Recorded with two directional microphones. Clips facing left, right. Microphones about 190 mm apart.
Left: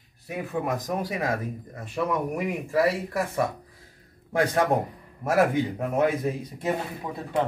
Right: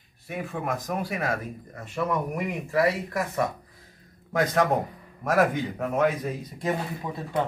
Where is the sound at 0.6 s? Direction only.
15° left (ahead or behind).